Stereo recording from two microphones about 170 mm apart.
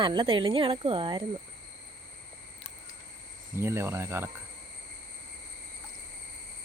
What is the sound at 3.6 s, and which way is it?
Speech, 15° right (ahead or behind).